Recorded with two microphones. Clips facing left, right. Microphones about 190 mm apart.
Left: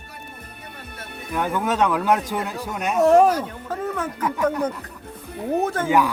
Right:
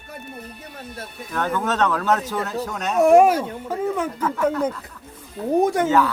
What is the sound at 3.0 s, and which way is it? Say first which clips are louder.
Speech: right 2 dB; 10° right (ahead or behind).